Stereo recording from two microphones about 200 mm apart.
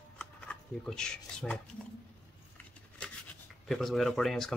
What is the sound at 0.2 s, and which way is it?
Speech, 5° left (ahead or behind).